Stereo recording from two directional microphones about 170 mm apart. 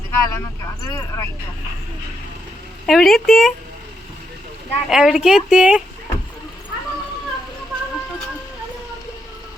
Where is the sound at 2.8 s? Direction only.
Centre (ahead or behind).